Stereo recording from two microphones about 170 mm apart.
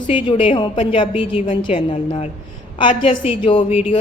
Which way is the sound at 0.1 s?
30° left (ahead or behind).